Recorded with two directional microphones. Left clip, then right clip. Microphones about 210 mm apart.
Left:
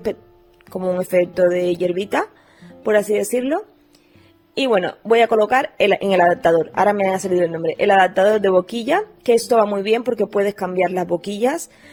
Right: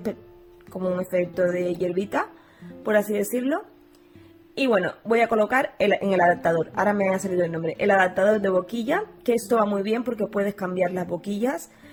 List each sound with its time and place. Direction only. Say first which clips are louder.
0.7 s a woman's voice: left 6 dB; 35° left (ahead or behind)